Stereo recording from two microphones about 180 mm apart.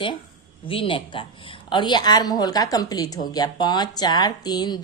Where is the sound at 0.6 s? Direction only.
30° left (ahead or behind).